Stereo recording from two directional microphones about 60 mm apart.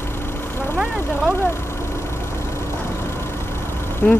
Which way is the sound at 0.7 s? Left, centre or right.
Centre.